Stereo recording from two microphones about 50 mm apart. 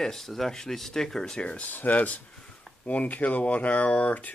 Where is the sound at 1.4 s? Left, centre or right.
Left.